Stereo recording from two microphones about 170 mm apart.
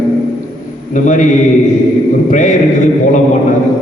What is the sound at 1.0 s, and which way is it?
Speech, 50° left (ahead or behind).